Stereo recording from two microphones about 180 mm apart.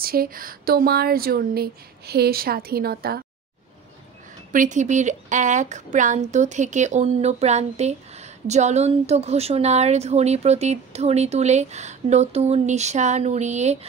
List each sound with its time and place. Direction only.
0.0 s speech: 55° right (ahead or behind)
4.5 s speech: 45° right (ahead or behind)